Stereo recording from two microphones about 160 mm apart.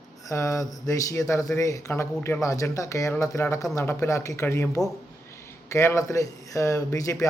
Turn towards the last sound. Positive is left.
turn(degrees=20)  # may be behind; listen again after turning